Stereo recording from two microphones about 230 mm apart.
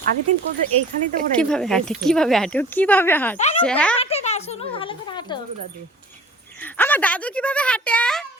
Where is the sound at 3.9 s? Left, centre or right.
Left.